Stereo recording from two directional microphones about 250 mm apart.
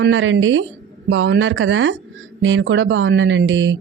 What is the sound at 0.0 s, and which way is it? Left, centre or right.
A woman's voice, right.